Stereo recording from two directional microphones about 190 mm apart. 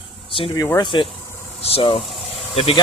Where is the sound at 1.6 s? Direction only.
30° left (ahead or behind).